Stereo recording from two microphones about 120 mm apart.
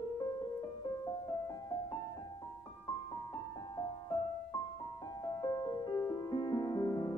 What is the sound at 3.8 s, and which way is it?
Music, 35° left (ahead or behind).